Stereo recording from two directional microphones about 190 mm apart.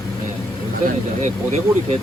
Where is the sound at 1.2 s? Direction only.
40° right (ahead or behind).